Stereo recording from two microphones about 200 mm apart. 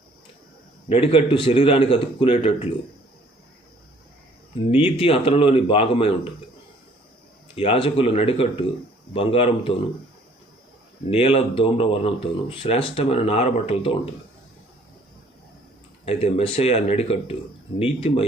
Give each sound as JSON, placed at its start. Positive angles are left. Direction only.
{"t": 0.9, "sound": "speech", "side_deg": 30}
{"t": 4.7, "sound": "speech", "side_deg": 30}
{"t": 7.5, "sound": "speech", "side_deg": 30}
{"t": 11.1, "sound": "speech", "side_deg": 30}
{"t": 16.0, "sound": "speech", "side_deg": 30}